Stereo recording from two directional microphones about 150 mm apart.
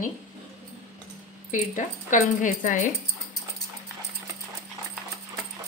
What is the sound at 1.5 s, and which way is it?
A woman's voice, 60° left (ahead or behind).